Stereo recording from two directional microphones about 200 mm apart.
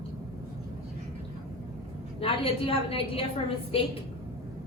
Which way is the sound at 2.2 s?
30° left (ahead or behind).